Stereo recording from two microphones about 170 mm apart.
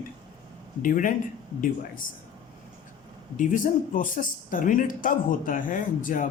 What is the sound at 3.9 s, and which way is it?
Speech, 50° left (ahead or behind).